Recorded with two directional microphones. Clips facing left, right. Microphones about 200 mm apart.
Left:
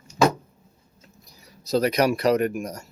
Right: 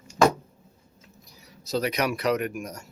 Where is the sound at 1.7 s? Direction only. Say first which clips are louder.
Left 6 dB; 40° left (ahead or behind).